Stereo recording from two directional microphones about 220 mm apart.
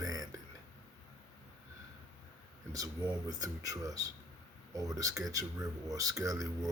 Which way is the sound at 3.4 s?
15° right (ahead or behind).